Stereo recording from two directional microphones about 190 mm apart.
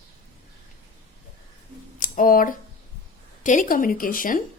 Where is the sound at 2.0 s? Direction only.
45° left (ahead or behind).